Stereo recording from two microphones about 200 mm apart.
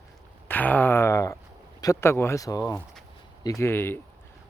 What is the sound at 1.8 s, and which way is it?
Speech, 15° left (ahead or behind).